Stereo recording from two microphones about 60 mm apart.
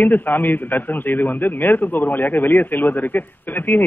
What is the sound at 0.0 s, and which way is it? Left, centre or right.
A man's voice, left.